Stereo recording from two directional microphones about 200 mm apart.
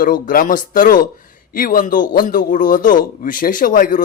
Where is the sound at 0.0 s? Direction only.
45° left (ahead or behind).